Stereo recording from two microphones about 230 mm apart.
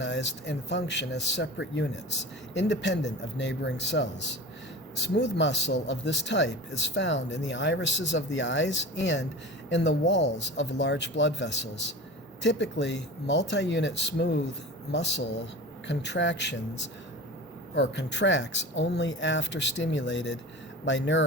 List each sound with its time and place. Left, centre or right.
0.0 s speech: left